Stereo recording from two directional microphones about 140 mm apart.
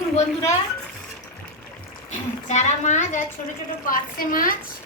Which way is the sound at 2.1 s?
55° left (ahead or behind).